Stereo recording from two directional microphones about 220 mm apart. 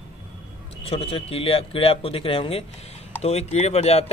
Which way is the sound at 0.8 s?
25° left (ahead or behind).